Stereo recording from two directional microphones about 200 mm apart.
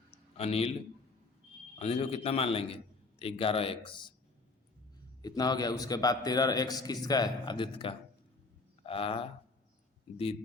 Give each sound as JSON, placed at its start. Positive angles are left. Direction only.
{"t": 0.3, "sound": "a man's voice", "side_deg": 30}
{"t": 1.8, "sound": "a man's voice", "side_deg": 30}
{"t": 5.2, "sound": "a man's voice", "side_deg": 20}